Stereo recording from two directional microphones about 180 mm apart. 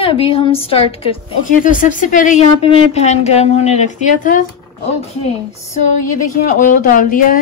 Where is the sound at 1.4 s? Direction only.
50° left (ahead or behind).